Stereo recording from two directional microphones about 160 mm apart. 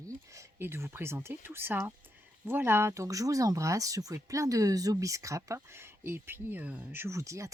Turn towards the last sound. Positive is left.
turn(degrees=-20)  # may be behind; listen again after turning